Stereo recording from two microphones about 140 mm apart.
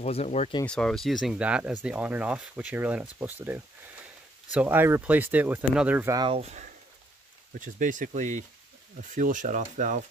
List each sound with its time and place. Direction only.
0.0 s speech: 50° left (ahead or behind)
0.7 s speech: 5° left (ahead or behind); by 6.0 s 10° right (ahead or behind)
6.0 s speech: 25° right (ahead or behind)
7.6 s speech: 70° right (ahead or behind)